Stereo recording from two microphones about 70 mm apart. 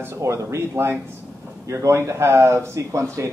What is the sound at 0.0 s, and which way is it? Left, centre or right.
Speech, right.